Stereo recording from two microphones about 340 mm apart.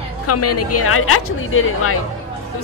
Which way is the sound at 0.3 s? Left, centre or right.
Left.